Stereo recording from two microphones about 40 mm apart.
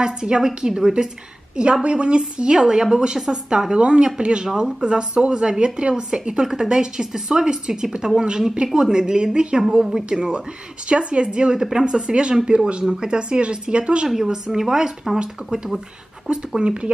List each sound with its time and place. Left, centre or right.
0.0 s a woman's voice: centre
10.9 s a woman's voice: right
12.8 s a woman's voice: centre
14.2 s a woman's voice: centre